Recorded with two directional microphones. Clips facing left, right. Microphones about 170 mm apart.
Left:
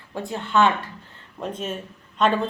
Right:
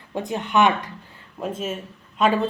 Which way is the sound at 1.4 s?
5° right (ahead or behind).